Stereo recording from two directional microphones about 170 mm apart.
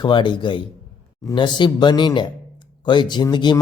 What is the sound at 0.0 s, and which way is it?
Speech, 25° left (ahead or behind).